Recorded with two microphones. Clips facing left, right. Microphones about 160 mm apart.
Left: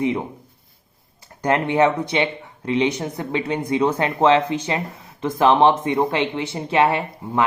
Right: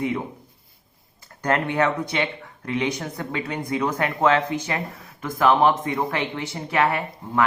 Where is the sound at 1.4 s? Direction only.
20° left (ahead or behind).